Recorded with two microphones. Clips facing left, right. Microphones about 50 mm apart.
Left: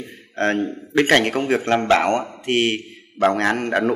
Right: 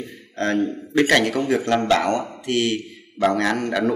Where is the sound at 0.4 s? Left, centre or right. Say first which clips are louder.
Left 1 dB; left.